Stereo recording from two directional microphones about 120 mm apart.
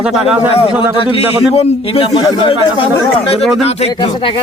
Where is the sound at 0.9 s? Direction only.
45° left (ahead or behind).